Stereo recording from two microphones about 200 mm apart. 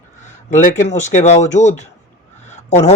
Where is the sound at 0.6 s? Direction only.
35° left (ahead or behind).